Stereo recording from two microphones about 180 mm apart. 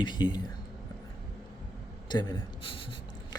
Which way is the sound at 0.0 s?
25° left (ahead or behind).